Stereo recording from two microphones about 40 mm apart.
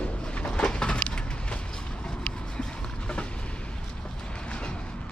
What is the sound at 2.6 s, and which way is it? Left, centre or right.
Vehicle, centre.